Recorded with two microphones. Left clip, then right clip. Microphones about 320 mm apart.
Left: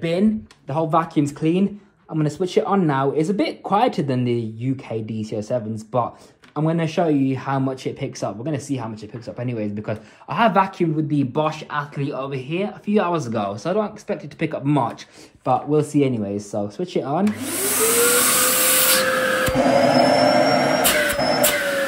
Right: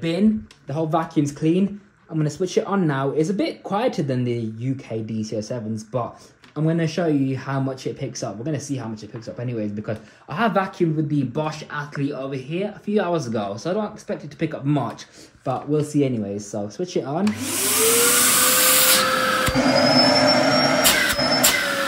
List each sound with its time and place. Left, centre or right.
0.7 s speech: centre
5.1 s speech: left
5.4 s speech: centre
17.7 s vacuum cleaner: centre